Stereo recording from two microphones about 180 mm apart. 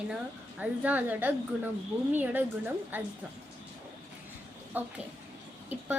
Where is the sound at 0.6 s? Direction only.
10° right (ahead or behind).